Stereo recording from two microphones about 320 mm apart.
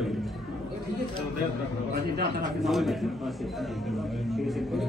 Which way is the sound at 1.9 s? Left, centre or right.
Right.